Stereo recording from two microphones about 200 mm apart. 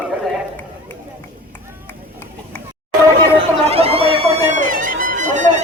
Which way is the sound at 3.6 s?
30° right (ahead or behind).